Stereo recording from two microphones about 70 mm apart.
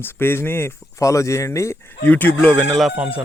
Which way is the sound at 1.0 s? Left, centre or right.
Left.